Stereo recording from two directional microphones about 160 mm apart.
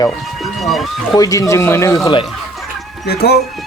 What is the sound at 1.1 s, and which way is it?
Speech, 20° left (ahead or behind).